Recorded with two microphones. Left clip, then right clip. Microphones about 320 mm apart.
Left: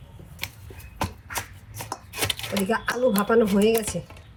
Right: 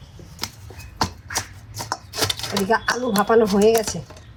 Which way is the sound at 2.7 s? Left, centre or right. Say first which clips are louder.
Right 3 dB; centre.